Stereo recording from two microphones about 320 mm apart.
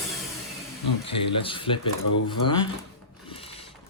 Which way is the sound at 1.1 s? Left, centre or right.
Centre.